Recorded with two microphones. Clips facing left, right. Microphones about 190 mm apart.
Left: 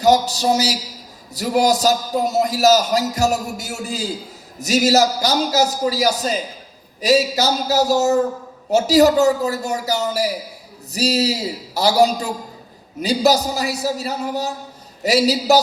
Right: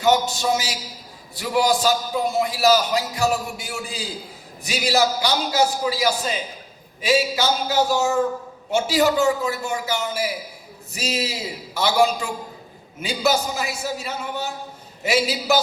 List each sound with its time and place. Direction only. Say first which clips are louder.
0.0 s a man's voice: left 4 dB; 35° left (ahead or behind)